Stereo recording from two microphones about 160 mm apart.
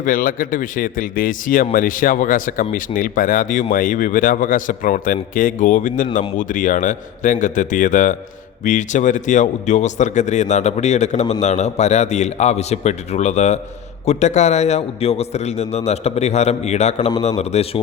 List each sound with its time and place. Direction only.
0.0 s a man's voice: 60° left (ahead or behind); by 17.7 s 45° left (ahead or behind)